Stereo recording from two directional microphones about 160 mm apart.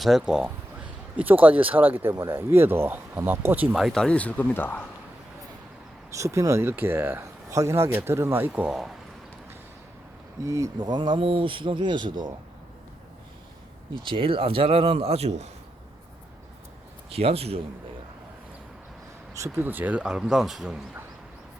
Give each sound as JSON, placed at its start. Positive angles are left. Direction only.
{"t": 0.0, "sound": "speech", "side_deg": 0}
{"t": 6.1, "sound": "speech", "side_deg": -20}
{"t": 10.4, "sound": "speech", "side_deg": -20}
{"t": 13.9, "sound": "a man's voice", "side_deg": -35}
{"t": 17.1, "sound": "a man's voice", "side_deg": -40}
{"t": 19.3, "sound": "speech", "side_deg": -15}